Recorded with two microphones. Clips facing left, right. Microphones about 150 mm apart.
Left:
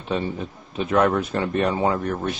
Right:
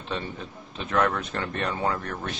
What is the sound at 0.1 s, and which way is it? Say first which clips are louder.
A man's voice: left 7 dB; 10° left (ahead or behind).